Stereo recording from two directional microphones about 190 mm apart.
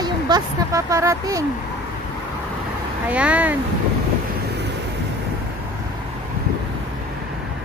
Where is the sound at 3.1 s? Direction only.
5° right (ahead or behind).